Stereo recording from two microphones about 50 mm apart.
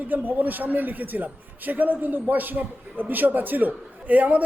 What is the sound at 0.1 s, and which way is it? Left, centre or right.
A man's voice, right.